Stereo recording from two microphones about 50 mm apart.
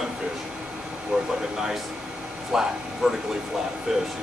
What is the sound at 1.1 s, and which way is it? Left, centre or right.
Speech, centre.